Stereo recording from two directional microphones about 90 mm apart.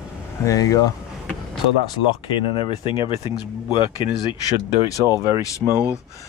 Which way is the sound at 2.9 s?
75° left (ahead or behind).